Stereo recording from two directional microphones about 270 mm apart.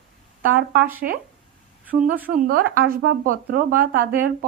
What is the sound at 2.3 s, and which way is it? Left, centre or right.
Speech, right.